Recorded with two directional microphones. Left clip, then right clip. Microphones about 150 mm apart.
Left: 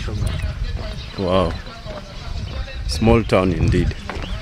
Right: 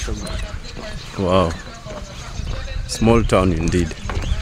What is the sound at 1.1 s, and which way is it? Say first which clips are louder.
Speech: right 1 dB; 20° right (ahead or behind).